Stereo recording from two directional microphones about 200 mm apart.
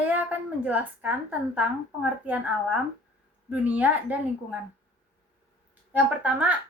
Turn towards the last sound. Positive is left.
turn(degrees=-5)  # may be behind; listen again after turning